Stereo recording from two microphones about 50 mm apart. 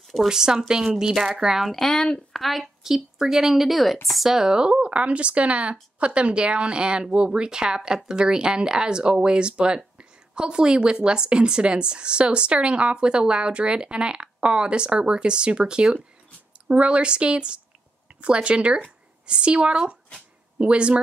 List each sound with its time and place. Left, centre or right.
0.3 s a woman's voice: centre
1.6 s speech: centre
2.0 s speech: centre
2.3 s a woman's voice: centre; by 21.0 s right